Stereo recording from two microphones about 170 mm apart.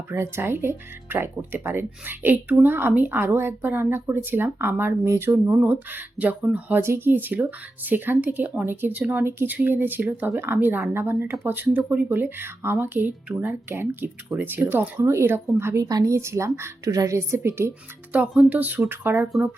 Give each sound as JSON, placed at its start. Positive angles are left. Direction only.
{"t": 0.1, "sound": "speech", "side_deg": -15}